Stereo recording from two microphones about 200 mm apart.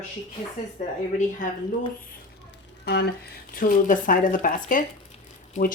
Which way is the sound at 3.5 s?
40° left (ahead or behind).